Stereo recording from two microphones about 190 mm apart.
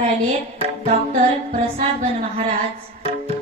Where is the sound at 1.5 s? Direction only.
35° right (ahead or behind).